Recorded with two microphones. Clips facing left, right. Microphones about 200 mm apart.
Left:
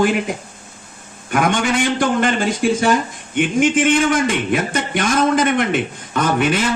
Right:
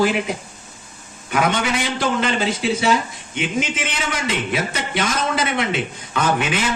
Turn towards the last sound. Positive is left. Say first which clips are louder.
# left 3 dB
turn(degrees=50)  # may be behind; listen again after turning